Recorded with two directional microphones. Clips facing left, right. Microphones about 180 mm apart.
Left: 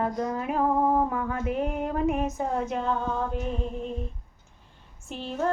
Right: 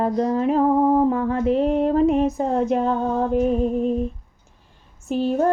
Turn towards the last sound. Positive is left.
turn(degrees=-40)  # may be behind; listen again after turning